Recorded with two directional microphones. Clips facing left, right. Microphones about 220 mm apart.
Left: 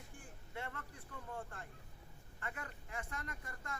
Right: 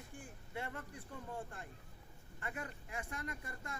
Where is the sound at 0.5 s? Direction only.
15° right (ahead or behind).